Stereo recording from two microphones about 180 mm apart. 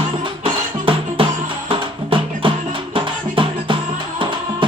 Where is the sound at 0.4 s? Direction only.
30° right (ahead or behind).